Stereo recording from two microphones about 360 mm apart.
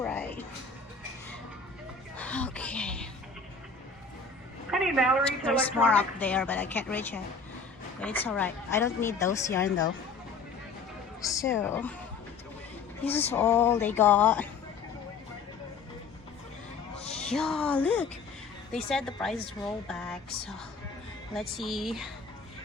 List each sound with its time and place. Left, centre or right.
0.0 s music: centre
2.1 s a sound: centre
4.7 s a woman's voice: centre
11.2 s a woman's voice: centre
13.3 s a woman's voice: centre
16.9 s music: centre
17.2 s a woman's voice: centre